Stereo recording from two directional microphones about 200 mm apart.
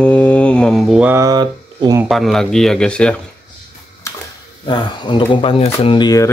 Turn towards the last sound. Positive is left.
turn(degrees=20)  # may be behind; listen again after turning